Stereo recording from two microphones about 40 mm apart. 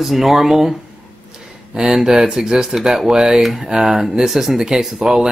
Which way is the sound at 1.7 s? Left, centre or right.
Right.